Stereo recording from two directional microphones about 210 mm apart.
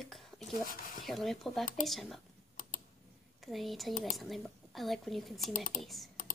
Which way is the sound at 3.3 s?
Centre (ahead or behind).